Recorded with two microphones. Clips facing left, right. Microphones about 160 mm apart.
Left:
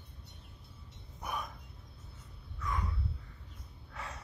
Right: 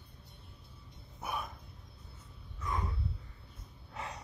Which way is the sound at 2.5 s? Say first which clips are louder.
Right 1 dB; 25° right (ahead or behind).